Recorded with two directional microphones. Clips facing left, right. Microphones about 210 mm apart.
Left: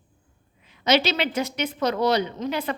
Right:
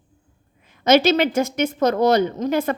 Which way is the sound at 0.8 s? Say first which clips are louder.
Right 6 dB; 50° right (ahead or behind).